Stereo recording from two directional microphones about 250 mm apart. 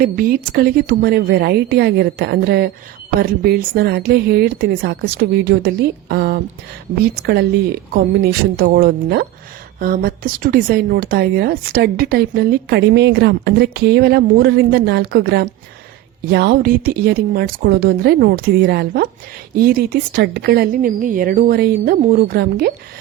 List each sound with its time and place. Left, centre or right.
0.0 s speech: right